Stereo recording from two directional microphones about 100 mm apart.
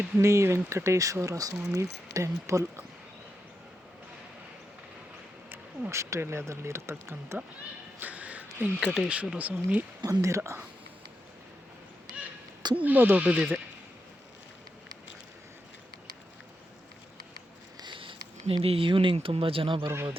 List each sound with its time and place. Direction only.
0.2 s speech: 30° right (ahead or behind)
5.5 s speech: 25° right (ahead or behind)
7.9 s a sound: 15° right (ahead or behind)
9.0 s speech: 10° right (ahead or behind)
10.0 s speech: 30° right (ahead or behind)
12.7 s speech: 15° right (ahead or behind)
17.7 s speech: 55° right (ahead or behind)